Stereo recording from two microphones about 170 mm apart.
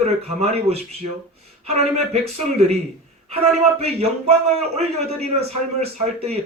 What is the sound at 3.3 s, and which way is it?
A man's voice, 35° right (ahead or behind).